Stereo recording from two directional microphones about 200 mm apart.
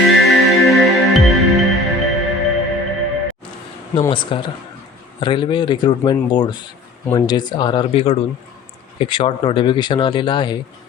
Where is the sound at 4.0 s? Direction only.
25° left (ahead or behind).